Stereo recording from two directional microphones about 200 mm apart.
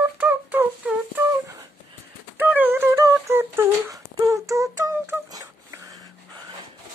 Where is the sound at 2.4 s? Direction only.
10° right (ahead or behind).